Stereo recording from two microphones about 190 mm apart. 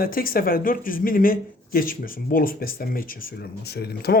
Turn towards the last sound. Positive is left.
turn(degrees=55)  # may be behind; listen again after turning